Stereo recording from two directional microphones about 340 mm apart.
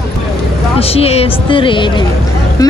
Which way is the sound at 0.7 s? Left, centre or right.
Centre.